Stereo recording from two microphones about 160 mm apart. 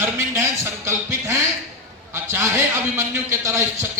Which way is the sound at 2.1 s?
15° right (ahead or behind).